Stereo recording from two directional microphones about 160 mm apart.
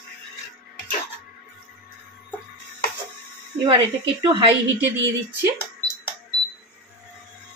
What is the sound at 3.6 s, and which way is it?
Speech, 30° right (ahead or behind).